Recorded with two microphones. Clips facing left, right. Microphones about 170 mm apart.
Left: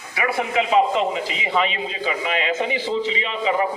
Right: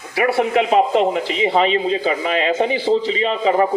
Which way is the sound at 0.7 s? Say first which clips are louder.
Right 3 dB; 50° right (ahead or behind).